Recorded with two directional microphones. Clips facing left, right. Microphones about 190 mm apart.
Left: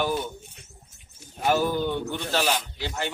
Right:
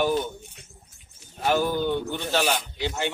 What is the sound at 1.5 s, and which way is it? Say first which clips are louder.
Speech: even; 5° left (ahead or behind).